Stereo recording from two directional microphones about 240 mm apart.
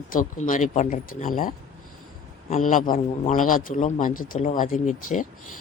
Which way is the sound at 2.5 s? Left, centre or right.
Left.